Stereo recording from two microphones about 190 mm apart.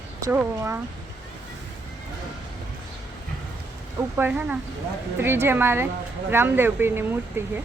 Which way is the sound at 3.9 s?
10° right (ahead or behind).